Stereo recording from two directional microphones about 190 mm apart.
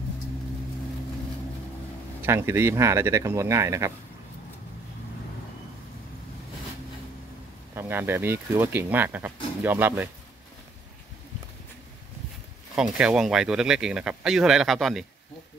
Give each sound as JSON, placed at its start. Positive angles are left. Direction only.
{"t": 2.2, "sound": "speech", "side_deg": -15}
{"t": 7.7, "sound": "speech", "side_deg": -10}
{"t": 12.7, "sound": "speech", "side_deg": -5}